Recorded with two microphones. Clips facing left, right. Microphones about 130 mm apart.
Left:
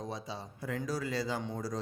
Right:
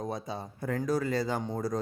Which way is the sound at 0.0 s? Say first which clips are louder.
Right 5 dB; 50° right (ahead or behind).